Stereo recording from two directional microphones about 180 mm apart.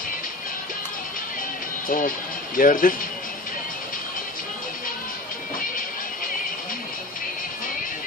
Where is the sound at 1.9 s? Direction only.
50° left (ahead or behind).